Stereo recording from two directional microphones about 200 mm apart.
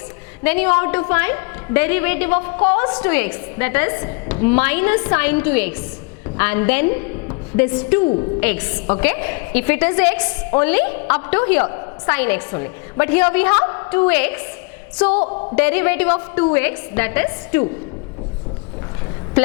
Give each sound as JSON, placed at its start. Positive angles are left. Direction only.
{"t": 0.4, "sound": "a woman's voice", "side_deg": 10}
{"t": 15.2, "sound": "a woman's voice", "side_deg": 30}
{"t": 15.5, "sound": "a woman's voice", "side_deg": 10}